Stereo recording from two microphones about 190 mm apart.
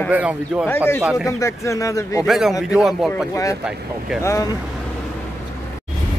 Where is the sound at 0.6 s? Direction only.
10° left (ahead or behind).